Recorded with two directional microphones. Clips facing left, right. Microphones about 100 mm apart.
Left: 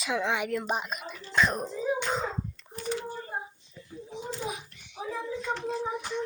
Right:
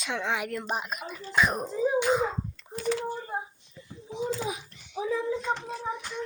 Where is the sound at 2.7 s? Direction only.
80° right.